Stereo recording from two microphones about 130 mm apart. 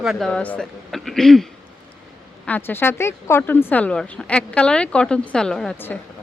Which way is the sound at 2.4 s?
15° left (ahead or behind).